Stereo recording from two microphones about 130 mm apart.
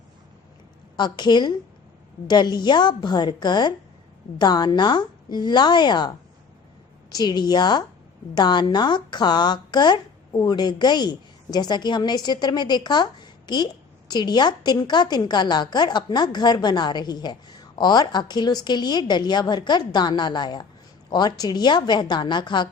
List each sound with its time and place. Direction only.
0.9 s a woman's voice: 35° left (ahead or behind)